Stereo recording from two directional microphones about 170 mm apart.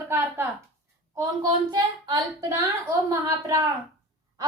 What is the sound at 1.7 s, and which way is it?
A woman's voice, 25° right (ahead or behind).